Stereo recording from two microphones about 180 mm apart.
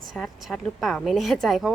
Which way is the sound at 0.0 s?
Centre (ahead or behind).